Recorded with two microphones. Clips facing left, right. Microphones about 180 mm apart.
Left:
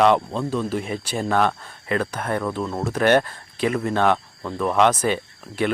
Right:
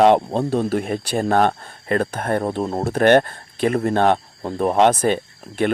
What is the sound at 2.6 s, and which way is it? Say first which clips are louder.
Speech: right 3 dB; 35° right (ahead or behind).